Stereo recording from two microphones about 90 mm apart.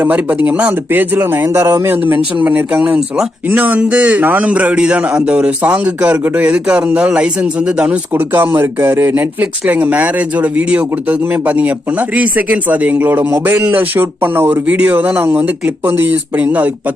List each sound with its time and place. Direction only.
0.0 s speech: 20° right (ahead or behind)